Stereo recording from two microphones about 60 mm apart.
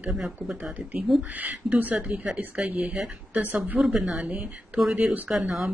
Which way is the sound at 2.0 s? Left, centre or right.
Centre.